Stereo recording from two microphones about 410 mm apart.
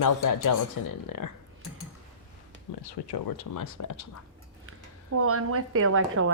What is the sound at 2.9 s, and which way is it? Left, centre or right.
Speech, left.